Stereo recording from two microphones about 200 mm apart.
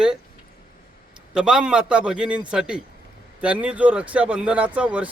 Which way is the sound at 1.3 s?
5° right (ahead or behind).